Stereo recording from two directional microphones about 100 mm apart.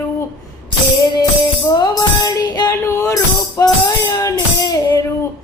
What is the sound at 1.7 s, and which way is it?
Music, 40° left (ahead or behind).